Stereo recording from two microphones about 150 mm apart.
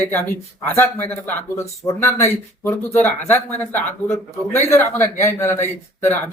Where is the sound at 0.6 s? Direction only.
10° left (ahead or behind).